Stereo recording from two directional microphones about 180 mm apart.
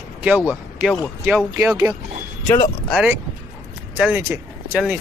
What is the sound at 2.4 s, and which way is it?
Speech, 20° left (ahead or behind).